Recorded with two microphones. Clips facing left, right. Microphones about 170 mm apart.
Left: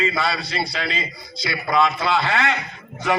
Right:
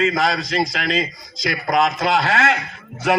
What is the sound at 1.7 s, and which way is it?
Speech, 40° right (ahead or behind).